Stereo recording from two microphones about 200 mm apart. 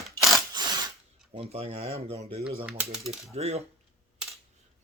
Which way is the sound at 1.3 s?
30° right (ahead or behind).